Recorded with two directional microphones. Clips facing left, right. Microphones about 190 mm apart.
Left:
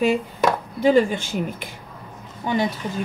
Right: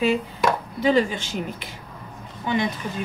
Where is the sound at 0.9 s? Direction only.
50° left (ahead or behind).